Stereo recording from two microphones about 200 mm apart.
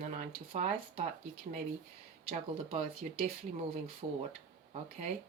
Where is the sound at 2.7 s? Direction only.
30° right (ahead or behind).